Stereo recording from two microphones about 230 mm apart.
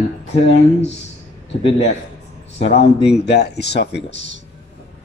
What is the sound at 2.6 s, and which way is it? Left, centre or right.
Speech, left.